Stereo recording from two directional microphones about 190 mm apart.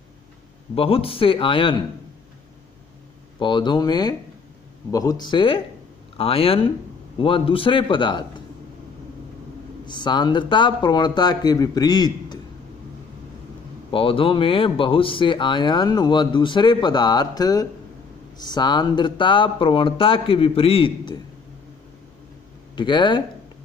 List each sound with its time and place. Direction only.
0.7 s speech: 30° left (ahead or behind)
3.3 s speech: 25° left (ahead or behind)
9.8 s speech: 25° left (ahead or behind)
13.9 s speech: 30° left (ahead or behind)
22.8 s speech: 25° left (ahead or behind)